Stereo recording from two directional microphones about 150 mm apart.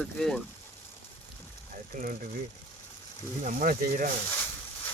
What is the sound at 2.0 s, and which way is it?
Speech, 65° right (ahead or behind).